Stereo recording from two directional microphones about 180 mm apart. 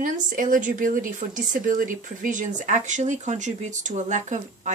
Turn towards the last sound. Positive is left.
turn(degrees=-40)  # may be behind; listen again after turning